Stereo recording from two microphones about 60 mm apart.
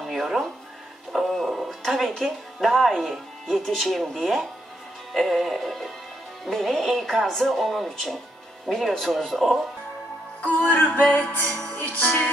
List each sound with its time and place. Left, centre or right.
0.0 s a sound: centre
1.1 s speech: centre
10.4 s music: left